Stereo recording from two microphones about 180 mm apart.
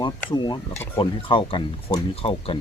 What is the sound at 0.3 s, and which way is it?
Speech, 25° left (ahead or behind).